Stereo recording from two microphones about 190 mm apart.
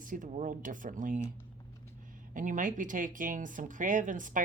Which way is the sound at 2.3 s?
45° right (ahead or behind).